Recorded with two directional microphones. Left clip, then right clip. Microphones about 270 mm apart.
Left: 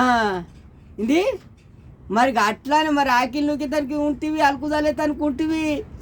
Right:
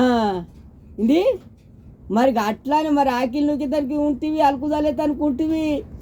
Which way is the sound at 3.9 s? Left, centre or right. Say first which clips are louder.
Right 1 dB; left.